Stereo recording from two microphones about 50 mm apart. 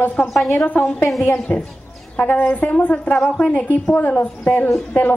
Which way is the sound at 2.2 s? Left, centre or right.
Left.